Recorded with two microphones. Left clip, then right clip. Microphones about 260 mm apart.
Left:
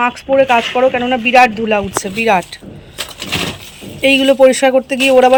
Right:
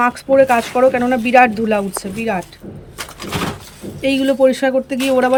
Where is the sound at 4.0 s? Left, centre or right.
Centre.